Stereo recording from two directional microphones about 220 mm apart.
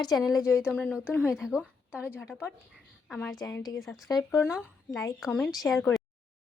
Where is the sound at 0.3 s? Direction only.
15° left (ahead or behind).